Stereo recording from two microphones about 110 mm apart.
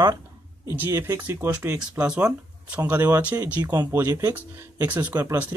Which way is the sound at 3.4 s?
35° right (ahead or behind).